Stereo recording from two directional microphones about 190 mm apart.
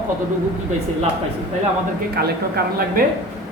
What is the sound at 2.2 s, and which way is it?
Speech, 55° right (ahead or behind).